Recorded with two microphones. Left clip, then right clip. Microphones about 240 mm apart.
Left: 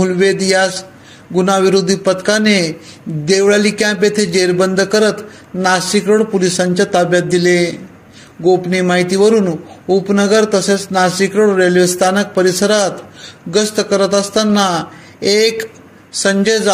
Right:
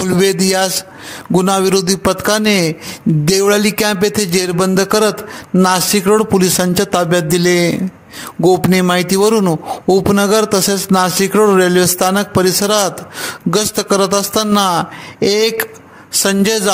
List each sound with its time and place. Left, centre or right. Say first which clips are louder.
0.0 s a man's voice: left 1 dB; right